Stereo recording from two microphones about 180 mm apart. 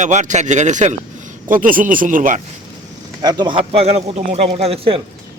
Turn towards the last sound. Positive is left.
turn(degrees=-30)  # may be behind; listen again after turning